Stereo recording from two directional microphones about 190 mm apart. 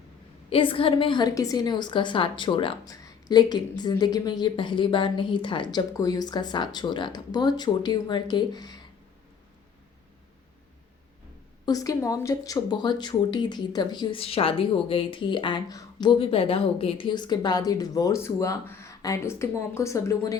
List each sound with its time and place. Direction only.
0.5 s speech: 30° left (ahead or behind)
11.6 s speech: 20° left (ahead or behind)